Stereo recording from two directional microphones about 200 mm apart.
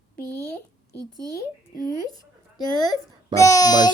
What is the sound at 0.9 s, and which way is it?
Speech, 20° right (ahead or behind).